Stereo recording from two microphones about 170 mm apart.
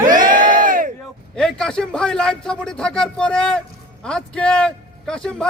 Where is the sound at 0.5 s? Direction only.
55° right (ahead or behind).